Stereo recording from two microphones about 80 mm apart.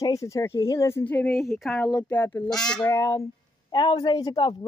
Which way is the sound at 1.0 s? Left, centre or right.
Left.